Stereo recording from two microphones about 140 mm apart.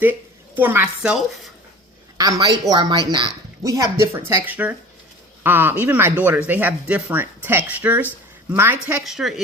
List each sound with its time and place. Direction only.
0.0 s speech: 15° right (ahead or behind)
2.1 s speech: 30° right (ahead or behind)
9.0 s speech: centre (ahead or behind)